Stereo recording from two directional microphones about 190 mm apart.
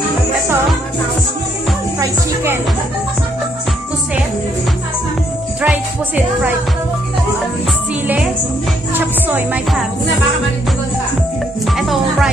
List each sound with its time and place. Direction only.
2.0 s music: 10° right (ahead or behind)
5.6 s music: 10° right (ahead or behind)
8.9 s speech: 10° right (ahead or behind)
11.6 s music: centre (ahead or behind)